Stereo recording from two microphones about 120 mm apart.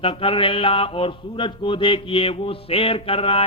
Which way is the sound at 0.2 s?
50° left (ahead or behind).